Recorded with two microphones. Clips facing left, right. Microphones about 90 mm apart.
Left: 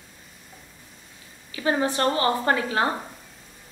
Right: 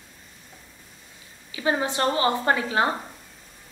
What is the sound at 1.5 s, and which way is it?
A woman's voice, 20° right (ahead or behind).